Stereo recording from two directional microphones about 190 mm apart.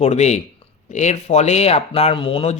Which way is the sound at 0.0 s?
35° left (ahead or behind).